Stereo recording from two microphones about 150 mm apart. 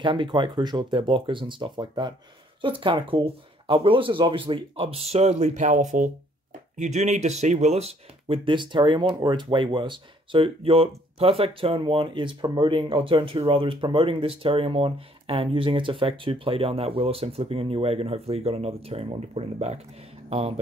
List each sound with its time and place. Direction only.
0.0 s speech: 35° right (ahead or behind)